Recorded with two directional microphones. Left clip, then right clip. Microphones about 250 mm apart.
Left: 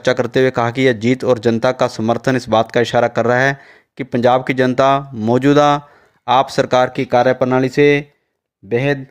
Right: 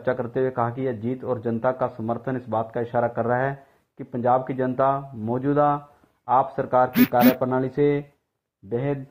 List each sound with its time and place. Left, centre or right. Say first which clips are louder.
0.0 s speech: left 10 dB; left